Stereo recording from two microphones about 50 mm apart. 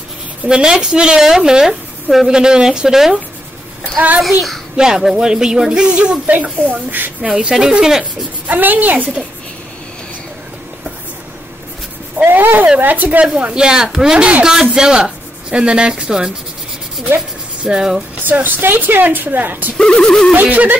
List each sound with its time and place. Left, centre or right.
0.5 s speech: centre
4.7 s speech: centre
6.3 s speech: right
7.2 s speech: right
8.0 s speech: right
12.3 s speech: right
13.2 s speech: right
17.6 s speech: centre
18.2 s speech: right
19.8 s a sound: centre
20.3 s speech: right